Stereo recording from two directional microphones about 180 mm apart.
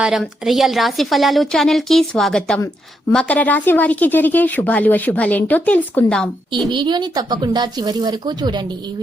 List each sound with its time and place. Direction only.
0.0 s a woman's voice: centre (ahead or behind)
6.7 s speech: 25° right (ahead or behind)